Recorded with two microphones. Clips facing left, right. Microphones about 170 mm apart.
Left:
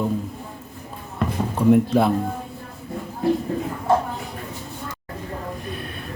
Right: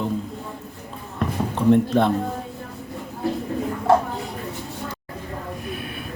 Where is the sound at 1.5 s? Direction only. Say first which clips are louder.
Left 1 dB; 10° left (ahead or behind).